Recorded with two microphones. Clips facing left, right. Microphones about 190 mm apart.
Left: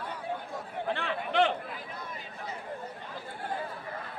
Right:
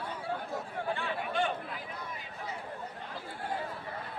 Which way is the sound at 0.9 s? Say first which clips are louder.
Left 4 dB; 75° left (ahead or behind).